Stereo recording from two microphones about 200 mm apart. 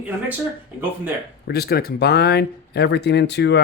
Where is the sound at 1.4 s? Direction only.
50° left (ahead or behind).